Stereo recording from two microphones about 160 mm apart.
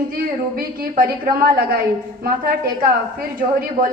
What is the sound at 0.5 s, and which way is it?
A woman's voice, 70° right (ahead or behind).